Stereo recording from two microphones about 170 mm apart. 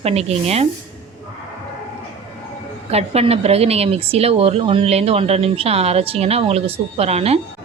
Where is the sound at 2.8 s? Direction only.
35° right (ahead or behind).